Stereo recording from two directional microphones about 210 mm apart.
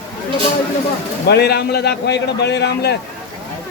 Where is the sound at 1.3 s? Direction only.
50° left (ahead or behind).